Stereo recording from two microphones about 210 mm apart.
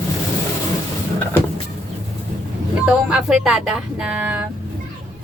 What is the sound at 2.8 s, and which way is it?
Speech, 5° right (ahead or behind).